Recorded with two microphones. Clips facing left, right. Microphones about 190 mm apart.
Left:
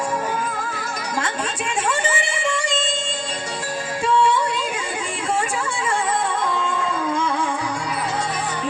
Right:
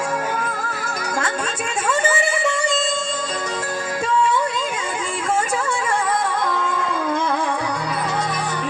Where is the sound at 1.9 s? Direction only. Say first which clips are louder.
Right 5 dB; 40° right (ahead or behind).